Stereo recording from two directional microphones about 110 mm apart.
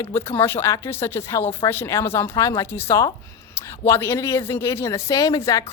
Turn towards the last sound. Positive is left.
turn(degrees=30)  # may be behind; listen again after turning